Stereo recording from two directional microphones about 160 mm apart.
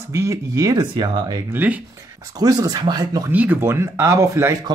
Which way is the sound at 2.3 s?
25° right (ahead or behind).